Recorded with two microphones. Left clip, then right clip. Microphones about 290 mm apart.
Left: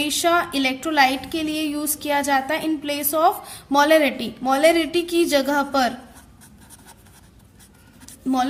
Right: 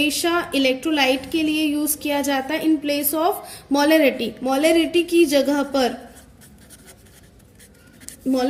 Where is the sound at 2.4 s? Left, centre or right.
Left.